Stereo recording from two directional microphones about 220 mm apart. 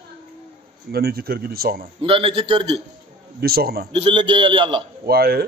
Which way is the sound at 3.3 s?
45° right (ahead or behind).